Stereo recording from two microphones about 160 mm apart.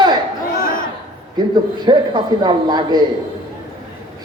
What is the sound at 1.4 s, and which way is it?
A man's voice, 25° right (ahead or behind).